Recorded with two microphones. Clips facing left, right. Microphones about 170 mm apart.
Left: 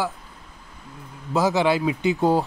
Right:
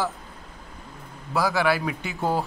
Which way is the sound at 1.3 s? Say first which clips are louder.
Left 3 dB; 20° left (ahead or behind).